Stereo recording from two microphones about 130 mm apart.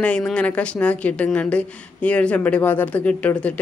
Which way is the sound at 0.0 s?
10° left (ahead or behind).